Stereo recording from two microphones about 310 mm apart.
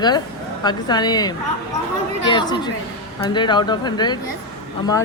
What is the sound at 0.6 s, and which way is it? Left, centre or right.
Speech, centre.